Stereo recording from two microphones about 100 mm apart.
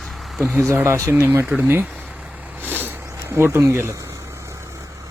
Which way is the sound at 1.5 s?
10° right (ahead or behind).